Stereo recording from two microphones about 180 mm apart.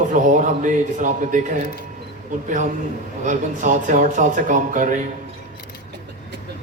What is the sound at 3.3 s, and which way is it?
A man's voice, 45° right (ahead or behind).